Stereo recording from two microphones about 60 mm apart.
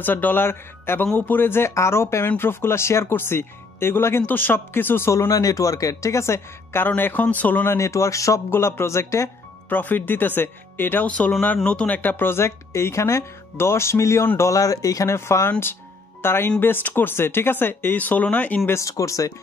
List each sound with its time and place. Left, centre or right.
0.0 s speech: left
1.7 s speech: left
4.3 s speech: left
5.3 s speech: left
7.0 s speech: left
7.7 s speech: left
8.5 s speech: left
9.7 s speech: left
11.9 s speech: left
14.5 s speech: left
15.0 s speech: left
18.7 s speech: left